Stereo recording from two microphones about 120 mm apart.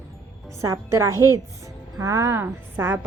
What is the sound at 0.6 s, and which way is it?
A woman's voice, 25° right (ahead or behind).